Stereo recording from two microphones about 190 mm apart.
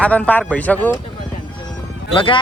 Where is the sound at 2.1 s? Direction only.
25° left (ahead or behind).